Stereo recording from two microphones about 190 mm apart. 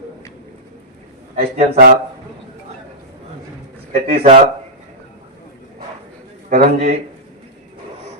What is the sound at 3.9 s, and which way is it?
Speech, 35° right (ahead or behind).